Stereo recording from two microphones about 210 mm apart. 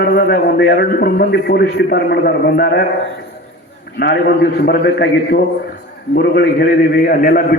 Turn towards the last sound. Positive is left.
turn(degrees=45)  # may be behind; listen again after turning